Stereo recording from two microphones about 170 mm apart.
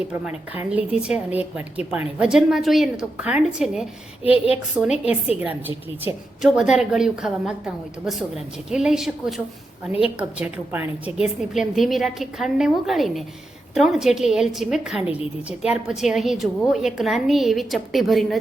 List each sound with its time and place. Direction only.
0.1 s a woman's voice: 10° right (ahead or behind)
5.0 s a woman's voice: 10° right (ahead or behind)